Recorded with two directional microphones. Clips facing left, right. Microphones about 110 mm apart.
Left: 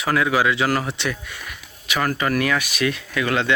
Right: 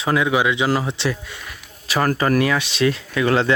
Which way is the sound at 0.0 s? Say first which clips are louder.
Right 1 dB; 20° right (ahead or behind).